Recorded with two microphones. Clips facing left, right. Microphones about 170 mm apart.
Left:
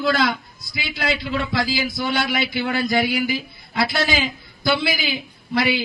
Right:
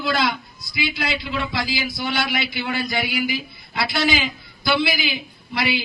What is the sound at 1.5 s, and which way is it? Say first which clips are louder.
Speech: left 3 dB; 50° left (ahead or behind).